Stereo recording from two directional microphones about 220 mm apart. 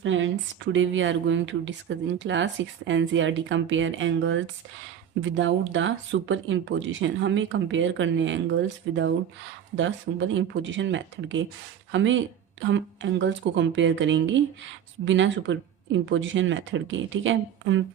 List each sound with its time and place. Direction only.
0.0 s a woman's voice: 60° right (ahead or behind)